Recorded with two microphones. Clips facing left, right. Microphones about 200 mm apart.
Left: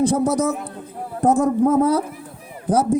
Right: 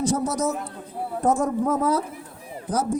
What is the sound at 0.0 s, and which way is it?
Speech, 60° left (ahead or behind).